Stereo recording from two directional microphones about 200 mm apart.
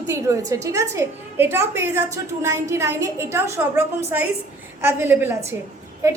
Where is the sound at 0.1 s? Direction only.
15° right (ahead or behind).